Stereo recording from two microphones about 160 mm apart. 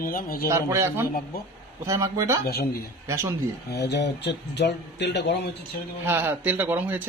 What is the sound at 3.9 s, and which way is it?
Speech, 90° left.